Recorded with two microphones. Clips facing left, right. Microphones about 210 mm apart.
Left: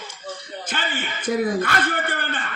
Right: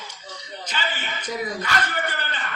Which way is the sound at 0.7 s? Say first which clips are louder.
Left 2 dB; 50° left (ahead or behind).